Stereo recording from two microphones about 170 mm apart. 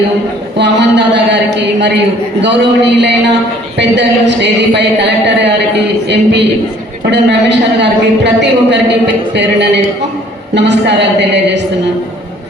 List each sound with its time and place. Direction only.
0.5 s a sound: 90° right
2.4 s a woman's voice: 90° right
7.0 s a woman's voice: 90° right